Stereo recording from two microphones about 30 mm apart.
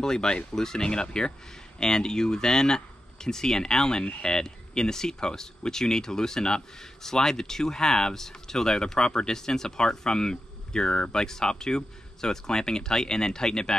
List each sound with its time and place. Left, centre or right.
0.0 s speech: left